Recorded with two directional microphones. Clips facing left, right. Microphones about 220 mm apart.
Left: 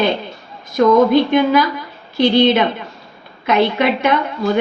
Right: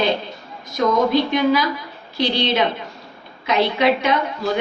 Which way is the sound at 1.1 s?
55° left (ahead or behind).